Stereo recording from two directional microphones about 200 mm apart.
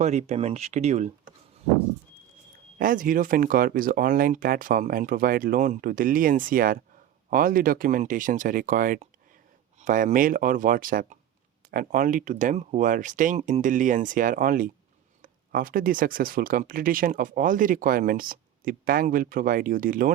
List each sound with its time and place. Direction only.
0.0 s speech: 35° right (ahead or behind)
2.7 s speech: 45° right (ahead or behind)